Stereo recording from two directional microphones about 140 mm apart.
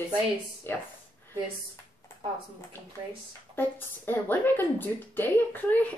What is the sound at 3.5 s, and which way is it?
A woman's voice, 15° left (ahead or behind).